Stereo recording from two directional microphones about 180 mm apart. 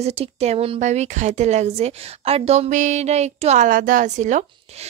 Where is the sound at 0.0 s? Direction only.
35° right (ahead or behind).